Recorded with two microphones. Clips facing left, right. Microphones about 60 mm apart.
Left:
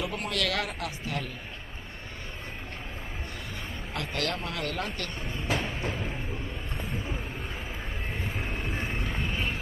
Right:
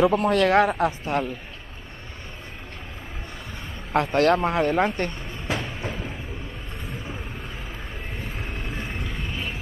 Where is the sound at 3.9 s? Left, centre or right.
Right.